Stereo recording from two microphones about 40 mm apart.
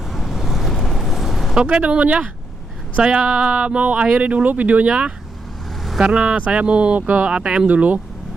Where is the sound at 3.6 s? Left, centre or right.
Right.